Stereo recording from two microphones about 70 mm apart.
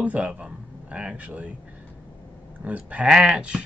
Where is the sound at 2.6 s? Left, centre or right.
Centre.